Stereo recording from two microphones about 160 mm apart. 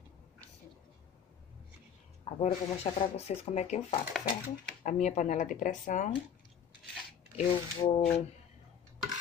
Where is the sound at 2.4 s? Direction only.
40° left (ahead or behind).